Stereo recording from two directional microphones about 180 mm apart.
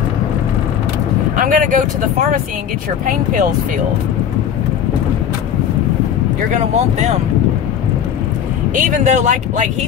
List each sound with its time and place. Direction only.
1.3 s speech: 50° right (ahead or behind)
6.5 s speech: 40° right (ahead or behind)
8.7 s speech: 45° right (ahead or behind)